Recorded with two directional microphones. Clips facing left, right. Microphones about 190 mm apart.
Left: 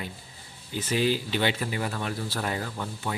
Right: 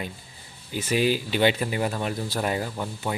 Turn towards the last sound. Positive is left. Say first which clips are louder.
# right 3 dB
turn(degrees=-15)  # may be behind; listen again after turning